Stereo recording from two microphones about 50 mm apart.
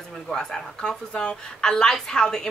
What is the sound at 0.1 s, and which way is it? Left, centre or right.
A woman's voice, centre.